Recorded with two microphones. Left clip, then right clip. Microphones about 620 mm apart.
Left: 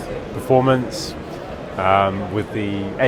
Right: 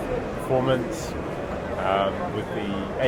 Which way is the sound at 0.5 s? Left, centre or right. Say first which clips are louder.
Left 8 dB; left.